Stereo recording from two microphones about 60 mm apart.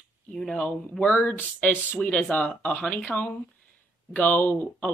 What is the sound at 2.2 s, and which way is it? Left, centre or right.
Speech, centre.